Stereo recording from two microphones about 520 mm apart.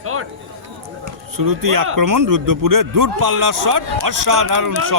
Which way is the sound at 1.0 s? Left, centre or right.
Right.